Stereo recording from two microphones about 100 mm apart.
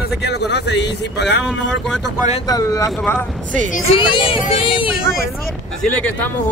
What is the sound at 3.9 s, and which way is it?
Speech, 55° left (ahead or behind).